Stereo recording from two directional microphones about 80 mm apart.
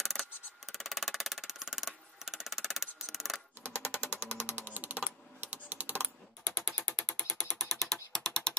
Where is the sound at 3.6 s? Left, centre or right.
Centre.